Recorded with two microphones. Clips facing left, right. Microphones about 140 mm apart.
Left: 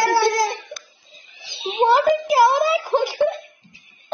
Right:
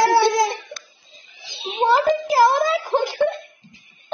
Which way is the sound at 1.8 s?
15° left (ahead or behind).